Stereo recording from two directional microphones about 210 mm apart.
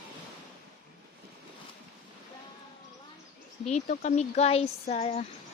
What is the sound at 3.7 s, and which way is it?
Speech, 35° left (ahead or behind).